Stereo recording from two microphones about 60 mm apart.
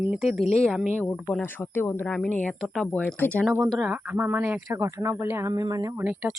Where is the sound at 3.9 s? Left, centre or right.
Right.